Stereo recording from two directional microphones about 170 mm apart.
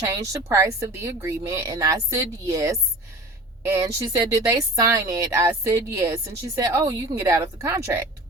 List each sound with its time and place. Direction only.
0.0 s a woman's voice: 20° right (ahead or behind)